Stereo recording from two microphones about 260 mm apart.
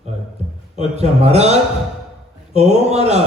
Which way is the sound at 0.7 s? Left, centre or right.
Right.